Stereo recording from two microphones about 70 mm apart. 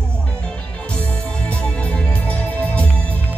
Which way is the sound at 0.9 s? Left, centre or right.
Centre.